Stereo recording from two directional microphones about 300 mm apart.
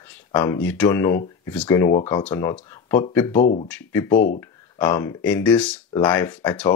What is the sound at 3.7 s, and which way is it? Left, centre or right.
Speech, centre.